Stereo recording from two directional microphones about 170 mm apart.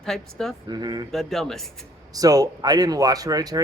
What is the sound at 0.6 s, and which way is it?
Speech, 25° right (ahead or behind).